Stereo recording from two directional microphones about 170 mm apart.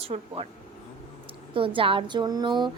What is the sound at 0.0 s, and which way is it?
Speech, 35° right (ahead or behind).